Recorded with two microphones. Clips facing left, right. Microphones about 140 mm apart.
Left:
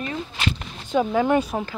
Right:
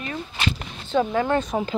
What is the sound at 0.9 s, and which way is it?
Speech, 10° left (ahead or behind).